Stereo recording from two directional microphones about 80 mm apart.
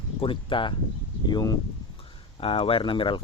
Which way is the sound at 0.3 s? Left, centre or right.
Left.